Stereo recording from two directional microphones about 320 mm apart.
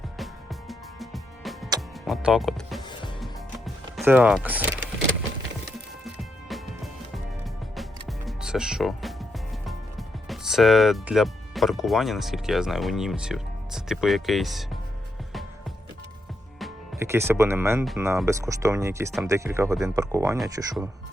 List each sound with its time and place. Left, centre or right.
0.7 s music: centre
2.0 s speech: centre
3.9 s speech: centre
8.0 s music: centre
10.2 s speech: centre
16.6 s speech: centre